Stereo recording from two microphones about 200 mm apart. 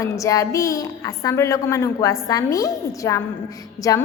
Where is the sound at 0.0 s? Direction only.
15° left (ahead or behind).